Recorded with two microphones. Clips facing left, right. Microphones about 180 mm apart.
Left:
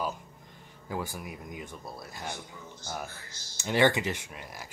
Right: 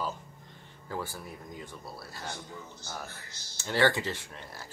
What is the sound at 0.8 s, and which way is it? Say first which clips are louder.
Speech: left 2 dB; 15° left (ahead or behind).